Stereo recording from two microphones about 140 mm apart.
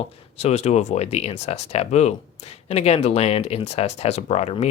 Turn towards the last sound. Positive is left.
turn(degrees=50)  # may be behind; listen again after turning